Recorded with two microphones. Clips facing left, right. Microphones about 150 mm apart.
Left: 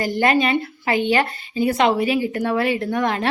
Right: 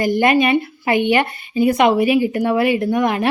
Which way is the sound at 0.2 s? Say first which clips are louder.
Right 1 dB; 15° right (ahead or behind).